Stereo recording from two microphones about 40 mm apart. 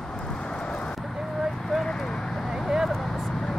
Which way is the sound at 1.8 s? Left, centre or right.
Centre.